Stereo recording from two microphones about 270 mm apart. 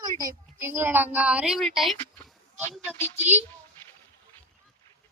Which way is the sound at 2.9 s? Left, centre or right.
Right.